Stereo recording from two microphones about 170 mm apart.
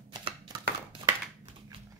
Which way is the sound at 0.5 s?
30° right (ahead or behind).